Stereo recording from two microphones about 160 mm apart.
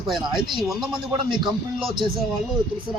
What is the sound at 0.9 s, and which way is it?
Speech, 30° right (ahead or behind).